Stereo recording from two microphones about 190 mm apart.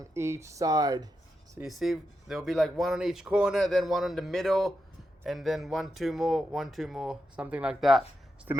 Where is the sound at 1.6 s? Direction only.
Centre (ahead or behind).